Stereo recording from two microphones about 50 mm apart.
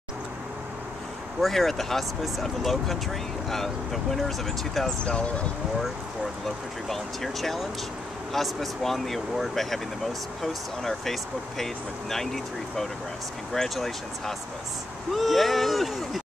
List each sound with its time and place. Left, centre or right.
1.4 s speech: centre
4.8 s speech: centre
6.9 s speech: centre